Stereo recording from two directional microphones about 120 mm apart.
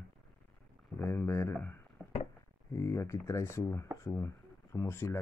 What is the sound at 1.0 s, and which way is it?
Speech, 20° left (ahead or behind).